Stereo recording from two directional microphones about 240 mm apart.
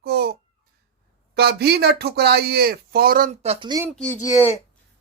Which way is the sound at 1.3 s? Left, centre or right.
Right.